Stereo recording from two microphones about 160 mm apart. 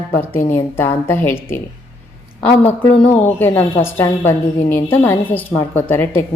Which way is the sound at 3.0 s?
10° left (ahead or behind).